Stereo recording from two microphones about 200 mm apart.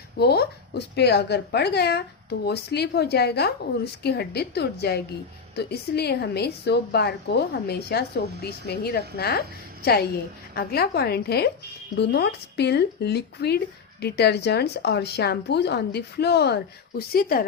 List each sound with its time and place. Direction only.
0.2 s a woman's voice: 55° left (ahead or behind)